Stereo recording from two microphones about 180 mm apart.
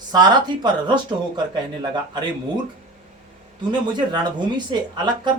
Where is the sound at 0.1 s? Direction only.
25° right (ahead or behind).